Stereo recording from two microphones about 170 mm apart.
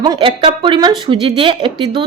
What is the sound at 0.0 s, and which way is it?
A woman's voice, 30° right (ahead or behind).